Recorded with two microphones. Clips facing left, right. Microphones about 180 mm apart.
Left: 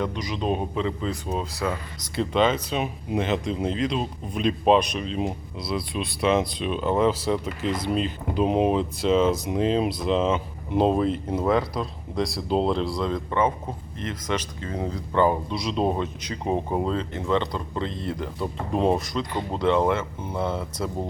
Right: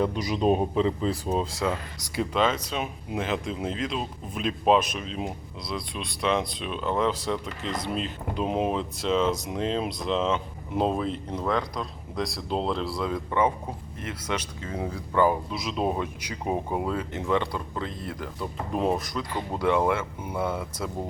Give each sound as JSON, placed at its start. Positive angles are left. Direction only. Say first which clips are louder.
{"t": 0.0, "sound": "speech", "louder": "right 3 dB", "side_deg": -5}
{"t": 0.8, "sound": "speech", "louder": "right 2 dB", "side_deg": -35}
{"t": 2.1, "sound": "speech", "louder": "left 3 dB", "side_deg": 0}
{"t": 18.3, "sound": "speech", "louder": "left 2 dB", "side_deg": 25}
{"t": 18.9, "sound": "speech", "louder": "left 3 dB", "side_deg": 0}
{"t": 19.3, "sound": "speech", "louder": "left 2 dB", "side_deg": 15}
{"t": 19.5, "sound": "speech", "louder": "left 2 dB", "side_deg": -10}